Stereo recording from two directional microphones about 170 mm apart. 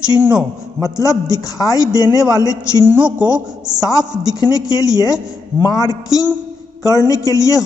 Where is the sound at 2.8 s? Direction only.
10° right (ahead or behind).